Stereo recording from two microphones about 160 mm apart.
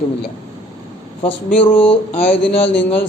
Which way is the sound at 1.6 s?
10° left (ahead or behind).